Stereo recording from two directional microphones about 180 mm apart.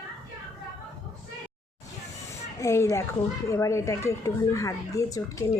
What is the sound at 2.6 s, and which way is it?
Speech, 15° left (ahead or behind).